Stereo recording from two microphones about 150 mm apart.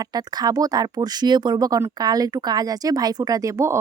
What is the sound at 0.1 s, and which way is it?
Speech, 25° right (ahead or behind).